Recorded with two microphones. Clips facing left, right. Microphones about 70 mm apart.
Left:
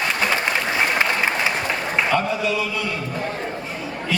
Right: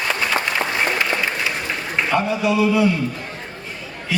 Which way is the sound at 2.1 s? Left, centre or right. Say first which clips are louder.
Right 6 dB; centre.